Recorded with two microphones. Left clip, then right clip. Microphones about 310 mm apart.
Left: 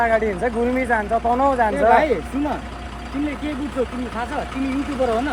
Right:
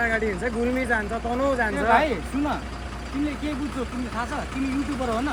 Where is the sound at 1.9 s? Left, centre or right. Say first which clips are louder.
Left 5 dB; centre.